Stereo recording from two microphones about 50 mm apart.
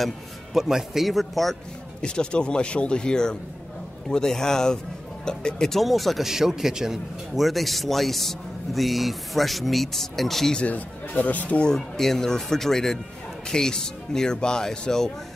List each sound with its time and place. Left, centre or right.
0.0 s speech: centre
2.0 s speech: centre
10.5 s speech: left
11.6 s speech: centre